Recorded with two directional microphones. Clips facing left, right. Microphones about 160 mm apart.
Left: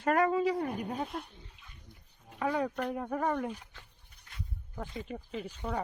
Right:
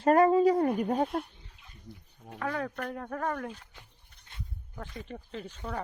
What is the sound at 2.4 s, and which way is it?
Speech, 15° left (ahead or behind).